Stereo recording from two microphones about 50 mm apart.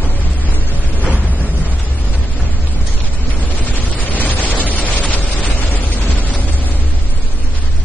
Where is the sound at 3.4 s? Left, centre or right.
Left.